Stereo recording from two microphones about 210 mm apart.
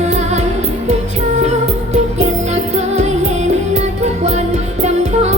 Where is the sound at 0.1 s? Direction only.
30° right (ahead or behind).